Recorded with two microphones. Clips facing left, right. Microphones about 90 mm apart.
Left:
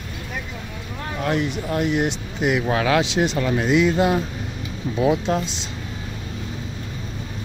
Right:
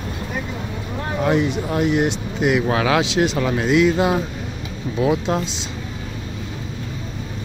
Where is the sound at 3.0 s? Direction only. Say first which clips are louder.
Right 2 dB; 90° right.